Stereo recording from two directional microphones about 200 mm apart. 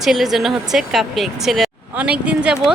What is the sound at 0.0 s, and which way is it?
Speech, centre (ahead or behind).